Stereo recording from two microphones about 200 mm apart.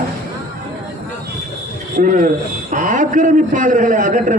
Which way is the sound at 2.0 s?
40° right (ahead or behind).